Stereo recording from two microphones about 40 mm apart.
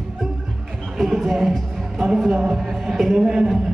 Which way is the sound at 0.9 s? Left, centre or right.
Centre.